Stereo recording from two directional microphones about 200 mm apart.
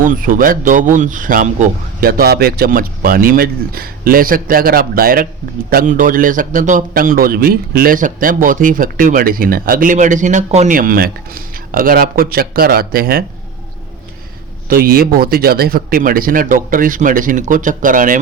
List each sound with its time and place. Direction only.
0.0 s a man's voice: 45° right (ahead or behind)
14.7 s a man's voice: 45° right (ahead or behind)